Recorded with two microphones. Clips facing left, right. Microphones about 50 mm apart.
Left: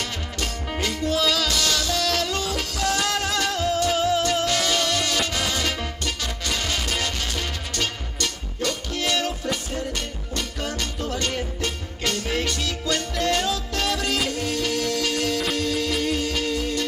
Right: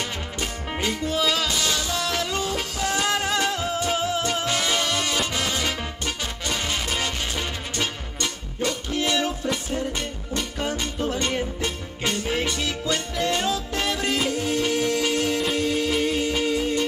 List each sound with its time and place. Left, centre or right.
0.4 s music: centre